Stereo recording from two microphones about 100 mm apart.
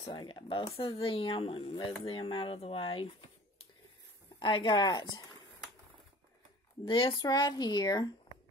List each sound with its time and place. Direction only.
0.1 s speech: 55° left (ahead or behind)
6.9 s speech: 55° left (ahead or behind)